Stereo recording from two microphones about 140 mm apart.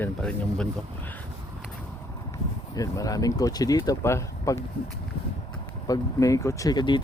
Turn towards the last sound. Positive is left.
turn(degrees=30)  # may be behind; listen again after turning